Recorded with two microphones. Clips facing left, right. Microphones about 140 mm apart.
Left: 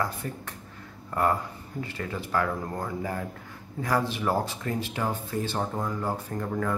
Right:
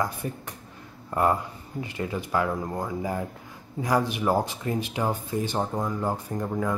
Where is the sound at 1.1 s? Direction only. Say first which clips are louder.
Right 2 dB; 15° right (ahead or behind).